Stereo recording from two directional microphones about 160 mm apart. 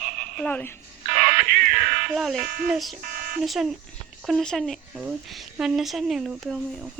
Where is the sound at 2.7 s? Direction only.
Centre (ahead or behind).